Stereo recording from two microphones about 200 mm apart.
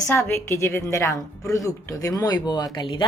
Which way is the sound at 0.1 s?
10° left (ahead or behind).